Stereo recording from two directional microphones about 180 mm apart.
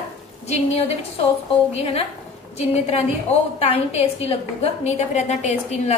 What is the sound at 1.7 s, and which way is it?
A woman's voice, 35° left (ahead or behind).